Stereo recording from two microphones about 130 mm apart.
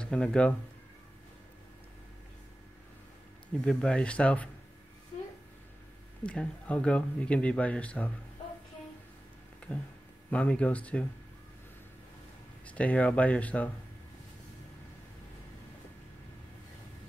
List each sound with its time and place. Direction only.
0.0 s speech: 5° left (ahead or behind)
3.6 s speech: 5° left (ahead or behind)
6.2 s speech: 10° left (ahead or behind)
9.6 s a sound: 10° left (ahead or behind)
10.3 s speech: 10° left (ahead or behind)
12.6 s speech: 10° left (ahead or behind)